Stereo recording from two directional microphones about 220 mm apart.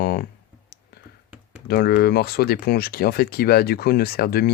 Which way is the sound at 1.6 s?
45° left (ahead or behind).